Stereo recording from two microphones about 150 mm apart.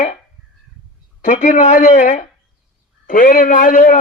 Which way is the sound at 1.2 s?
55° left (ahead or behind).